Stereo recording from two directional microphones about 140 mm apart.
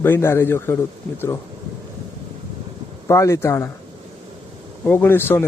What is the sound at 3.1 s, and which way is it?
Speech, 20° left (ahead or behind).